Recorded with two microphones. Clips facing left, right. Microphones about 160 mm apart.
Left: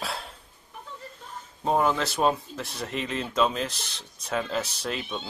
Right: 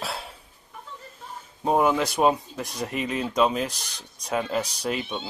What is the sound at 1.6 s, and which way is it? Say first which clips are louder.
Speech: right 3 dB; 10° right (ahead or behind).